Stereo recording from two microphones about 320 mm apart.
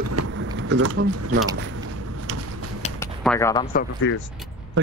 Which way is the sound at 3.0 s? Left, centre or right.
Centre.